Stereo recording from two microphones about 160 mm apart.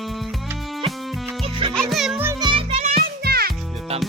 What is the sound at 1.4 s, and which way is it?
Music, 30° right (ahead or behind).